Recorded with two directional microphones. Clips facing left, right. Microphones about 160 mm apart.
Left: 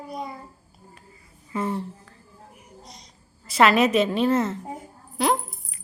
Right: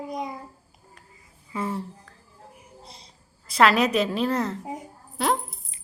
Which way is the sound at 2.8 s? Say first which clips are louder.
Left 2 dB; 30° right (ahead or behind).